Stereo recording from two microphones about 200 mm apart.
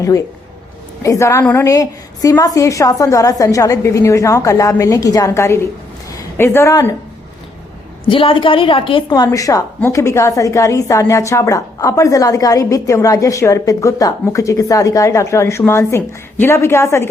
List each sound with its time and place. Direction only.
1.0 s a woman's voice: 15° left (ahead or behind)
8.1 s a woman's voice: 25° left (ahead or behind)